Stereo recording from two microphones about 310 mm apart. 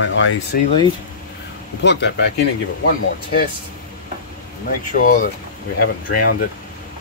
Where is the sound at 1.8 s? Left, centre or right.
Left.